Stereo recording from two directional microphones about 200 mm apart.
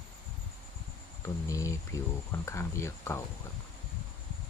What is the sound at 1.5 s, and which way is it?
Speech, 15° left (ahead or behind).